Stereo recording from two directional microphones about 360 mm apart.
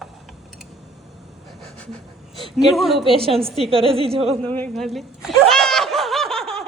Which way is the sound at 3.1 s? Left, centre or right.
Centre.